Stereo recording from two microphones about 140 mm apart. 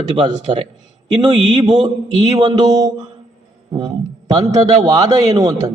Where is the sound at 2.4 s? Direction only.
30° right (ahead or behind).